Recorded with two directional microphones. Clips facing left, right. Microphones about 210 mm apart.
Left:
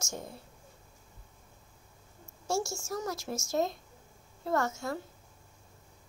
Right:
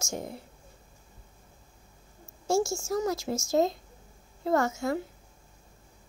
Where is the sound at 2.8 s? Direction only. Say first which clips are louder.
Right 7 dB; 15° right (ahead or behind).